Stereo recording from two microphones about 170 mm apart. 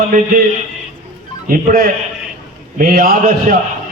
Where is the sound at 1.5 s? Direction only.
55° right (ahead or behind).